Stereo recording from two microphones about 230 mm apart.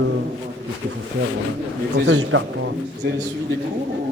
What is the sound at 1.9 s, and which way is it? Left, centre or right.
Speech, right.